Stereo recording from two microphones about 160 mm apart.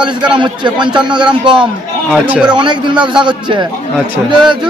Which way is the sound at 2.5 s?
30° right (ahead or behind).